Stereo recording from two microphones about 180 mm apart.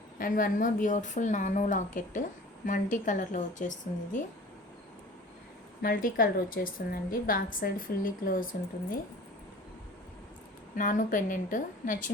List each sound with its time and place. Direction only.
0.2 s a woman's voice: 50° left (ahead or behind)
5.8 s a woman's voice: 50° left (ahead or behind)
10.8 s a woman's voice: 45° left (ahead or behind)